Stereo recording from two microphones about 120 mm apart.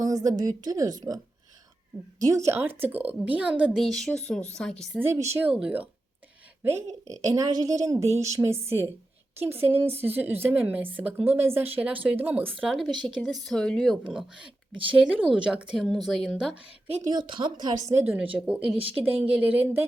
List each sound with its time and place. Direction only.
0.0 s a woman's voice: 30° right (ahead or behind)
2.2 s a woman's voice: 25° right (ahead or behind); by 4.7 s 5° left (ahead or behind)
4.9 s a woman's voice: 20° right (ahead or behind)
5.5 s a woman's voice: 5° right (ahead or behind)
6.6 s a woman's voice: 20° right (ahead or behind)
12.5 s speech: centre (ahead or behind)
14.0 s a woman's voice: 5° right (ahead or behind)
17.0 s a woman's voice: 35° right (ahead or behind)
17.9 s a woman's voice: 15° right (ahead or behind)
18.8 s a woman's voice: 50° right (ahead or behind)
19.3 s a woman's voice: 10° right (ahead or behind)